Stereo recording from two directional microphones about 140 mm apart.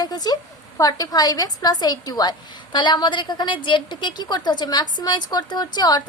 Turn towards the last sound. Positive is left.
turn(degrees=30)  # may be behind; listen again after turning